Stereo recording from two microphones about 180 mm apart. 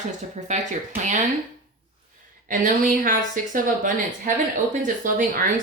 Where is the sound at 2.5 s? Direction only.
45° right (ahead or behind).